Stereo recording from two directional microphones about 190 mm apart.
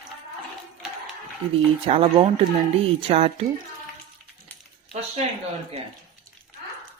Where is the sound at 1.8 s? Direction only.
30° right (ahead or behind).